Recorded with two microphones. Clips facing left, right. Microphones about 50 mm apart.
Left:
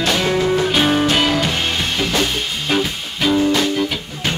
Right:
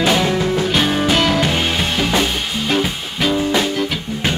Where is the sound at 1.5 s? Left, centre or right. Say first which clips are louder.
Right 2 dB; centre.